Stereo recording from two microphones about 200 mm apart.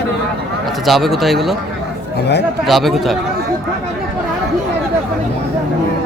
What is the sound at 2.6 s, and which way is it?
Speech, centre (ahead or behind).